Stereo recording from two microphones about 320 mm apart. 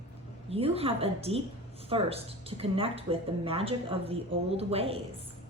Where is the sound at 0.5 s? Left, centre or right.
Centre.